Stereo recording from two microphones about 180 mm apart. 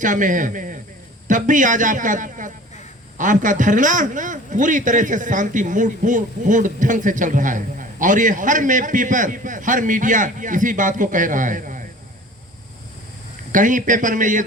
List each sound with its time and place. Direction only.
0.0 s a man's voice: 45° right (ahead or behind)
13.5 s a man's voice: 45° right (ahead or behind)